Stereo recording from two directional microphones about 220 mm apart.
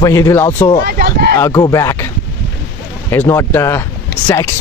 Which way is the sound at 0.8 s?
45° right (ahead or behind).